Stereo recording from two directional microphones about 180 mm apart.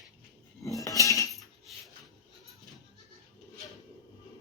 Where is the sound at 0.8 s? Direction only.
20° left (ahead or behind).